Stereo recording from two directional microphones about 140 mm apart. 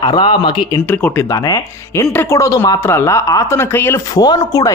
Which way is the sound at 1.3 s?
30° left (ahead or behind).